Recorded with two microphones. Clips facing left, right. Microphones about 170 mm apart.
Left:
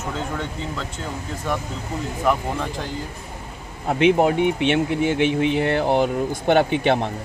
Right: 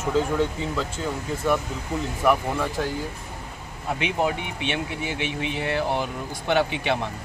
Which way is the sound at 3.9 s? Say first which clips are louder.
Left 8 dB; 50° left (ahead or behind).